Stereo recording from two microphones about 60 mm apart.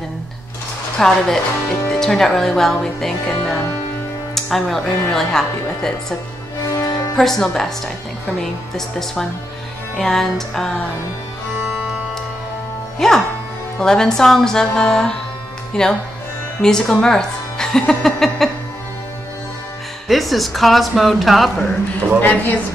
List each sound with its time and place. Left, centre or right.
0.9 s a woman's voice: centre
7.2 s a woman's voice: centre
13.0 s a woman's voice: centre
20.1 s speech: centre
22.2 s a woman's voice: left